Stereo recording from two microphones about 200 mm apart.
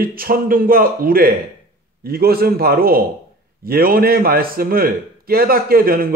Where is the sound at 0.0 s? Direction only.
45° right (ahead or behind).